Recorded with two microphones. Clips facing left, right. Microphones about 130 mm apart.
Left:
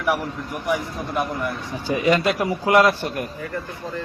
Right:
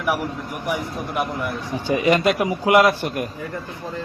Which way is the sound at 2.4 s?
15° right (ahead or behind).